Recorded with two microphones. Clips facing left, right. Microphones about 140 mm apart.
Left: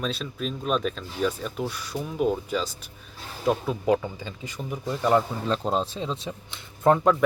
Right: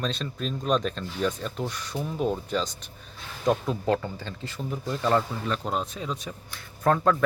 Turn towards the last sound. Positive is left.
turn(degrees=15)  # may be behind; listen again after turning